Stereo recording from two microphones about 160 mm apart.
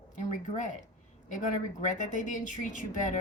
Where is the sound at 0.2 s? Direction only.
50° left (ahead or behind).